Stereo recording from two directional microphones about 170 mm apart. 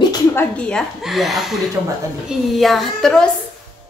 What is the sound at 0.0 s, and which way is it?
Speech, 20° left (ahead or behind).